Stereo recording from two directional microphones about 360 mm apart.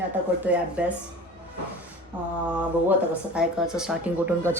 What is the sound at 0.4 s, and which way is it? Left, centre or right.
Speech, centre.